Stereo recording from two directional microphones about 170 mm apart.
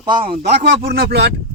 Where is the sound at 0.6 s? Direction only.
65° right (ahead or behind).